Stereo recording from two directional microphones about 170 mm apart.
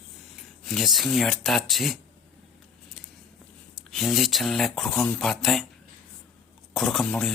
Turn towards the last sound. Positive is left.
turn(degrees=0)  # may be behind; listen again after turning